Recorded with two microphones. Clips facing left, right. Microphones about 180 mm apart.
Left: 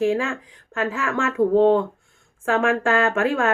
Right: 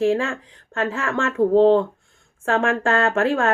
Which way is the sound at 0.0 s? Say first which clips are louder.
Right 1 dB; 30° right (ahead or behind).